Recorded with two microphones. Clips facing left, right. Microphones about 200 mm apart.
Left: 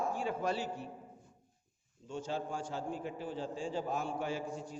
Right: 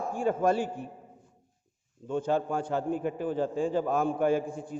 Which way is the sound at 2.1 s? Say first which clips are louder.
Right 10 dB; 55° right (ahead or behind).